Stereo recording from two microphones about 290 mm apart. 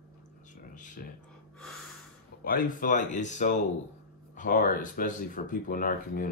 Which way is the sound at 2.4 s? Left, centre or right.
Left.